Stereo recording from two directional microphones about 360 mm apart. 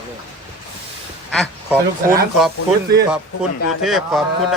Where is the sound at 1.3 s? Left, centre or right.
Centre.